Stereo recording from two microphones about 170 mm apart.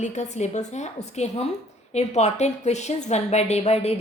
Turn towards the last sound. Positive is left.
turn(degrees=40)  # may be behind; listen again after turning